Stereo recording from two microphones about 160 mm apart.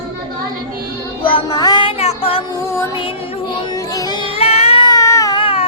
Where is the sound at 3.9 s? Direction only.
25° left (ahead or behind).